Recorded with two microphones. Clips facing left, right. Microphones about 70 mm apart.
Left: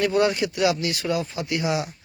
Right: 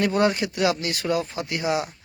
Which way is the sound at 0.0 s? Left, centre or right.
Right.